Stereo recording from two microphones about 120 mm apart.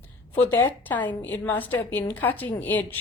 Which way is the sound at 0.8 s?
15° left (ahead or behind).